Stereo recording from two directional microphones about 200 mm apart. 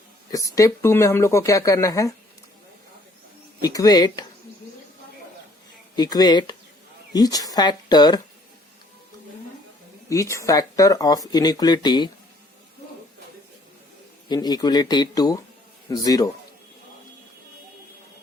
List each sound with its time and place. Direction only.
0.3 s speech: 15° left (ahead or behind)
3.6 s speech: 20° left (ahead or behind)
6.0 s speech: 20° left (ahead or behind)
10.1 s speech: 15° left (ahead or behind)
14.3 s speech: 20° left (ahead or behind)